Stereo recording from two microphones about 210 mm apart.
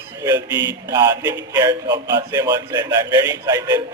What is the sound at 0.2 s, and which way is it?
A man's voice, 15° right (ahead or behind).